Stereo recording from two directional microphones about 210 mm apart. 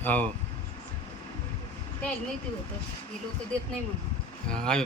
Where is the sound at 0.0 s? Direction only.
5° left (ahead or behind).